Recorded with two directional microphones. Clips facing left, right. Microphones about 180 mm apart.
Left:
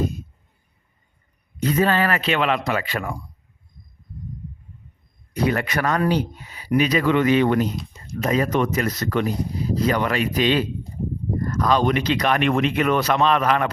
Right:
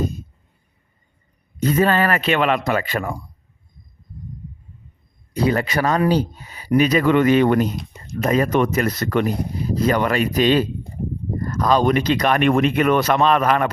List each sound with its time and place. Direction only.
1.5 s speech: 45° right (ahead or behind)
5.3 s speech: 30° right (ahead or behind); by 13.7 s 45° right (ahead or behind)